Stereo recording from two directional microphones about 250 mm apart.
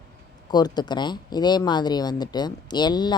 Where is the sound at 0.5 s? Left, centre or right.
Centre.